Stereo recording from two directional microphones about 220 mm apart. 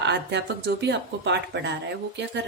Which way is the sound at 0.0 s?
50° right (ahead or behind).